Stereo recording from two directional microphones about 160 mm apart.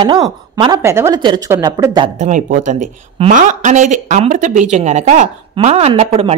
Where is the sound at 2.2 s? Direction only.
50° right (ahead or behind).